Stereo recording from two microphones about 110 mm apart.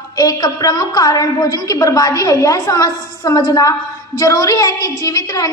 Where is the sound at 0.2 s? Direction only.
35° left (ahead or behind).